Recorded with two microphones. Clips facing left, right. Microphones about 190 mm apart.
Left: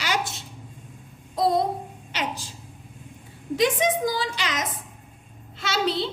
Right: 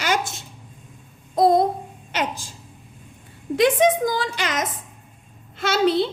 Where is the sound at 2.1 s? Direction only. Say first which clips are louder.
Right 4 dB; 50° right (ahead or behind).